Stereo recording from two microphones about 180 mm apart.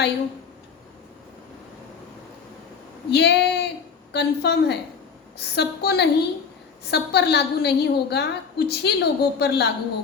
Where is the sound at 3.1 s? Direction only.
65° left (ahead or behind).